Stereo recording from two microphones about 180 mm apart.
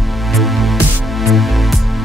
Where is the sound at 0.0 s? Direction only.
Centre (ahead or behind).